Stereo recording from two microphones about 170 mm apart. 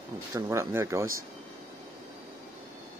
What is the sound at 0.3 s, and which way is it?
Speech, 20° right (ahead or behind).